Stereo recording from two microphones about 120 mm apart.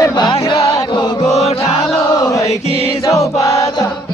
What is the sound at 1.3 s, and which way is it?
Speech, 65° left (ahead or behind).